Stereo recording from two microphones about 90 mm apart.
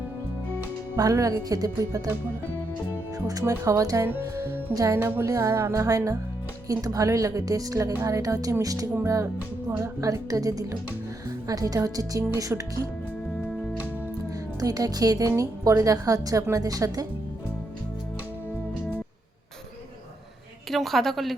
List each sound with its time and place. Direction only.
1.1 s speech: 40° right (ahead or behind)
3.2 s speech: 40° right (ahead or behind)
4.9 s speech: 20° right (ahead or behind)
5.2 s speech: 40° right (ahead or behind)
7.9 s speech: 30° right (ahead or behind)
8.2 s speech: 40° right (ahead or behind)
14.6 s speech: 45° right (ahead or behind)
20.7 s a woman's voice: centre (ahead or behind)